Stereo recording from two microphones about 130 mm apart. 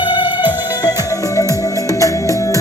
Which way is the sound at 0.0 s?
35° left (ahead or behind).